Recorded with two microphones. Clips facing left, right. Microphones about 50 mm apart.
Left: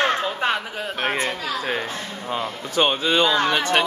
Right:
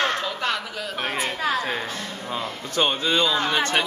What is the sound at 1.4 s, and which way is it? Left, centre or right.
Speech, right.